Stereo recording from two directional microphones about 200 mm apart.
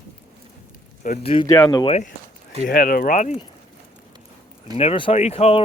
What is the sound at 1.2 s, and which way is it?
Speech, 30° left (ahead or behind).